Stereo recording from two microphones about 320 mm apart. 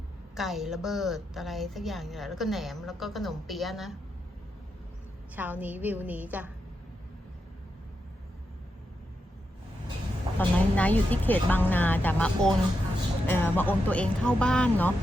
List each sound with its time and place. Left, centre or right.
0.3 s a woman's voice: centre
5.4 s a woman's voice: centre
10.3 s a woman's voice: centre